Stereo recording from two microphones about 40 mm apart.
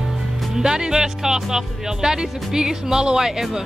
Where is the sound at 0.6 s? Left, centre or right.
Centre.